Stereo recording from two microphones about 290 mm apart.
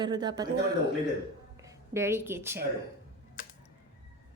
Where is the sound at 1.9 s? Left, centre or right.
Centre.